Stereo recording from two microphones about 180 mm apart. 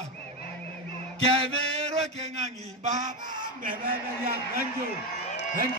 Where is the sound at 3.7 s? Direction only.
50° right (ahead or behind).